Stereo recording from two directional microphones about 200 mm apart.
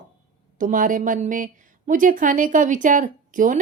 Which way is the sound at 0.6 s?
40° right (ahead or behind).